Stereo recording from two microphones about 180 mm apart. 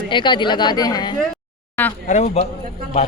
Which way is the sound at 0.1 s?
25° left (ahead or behind).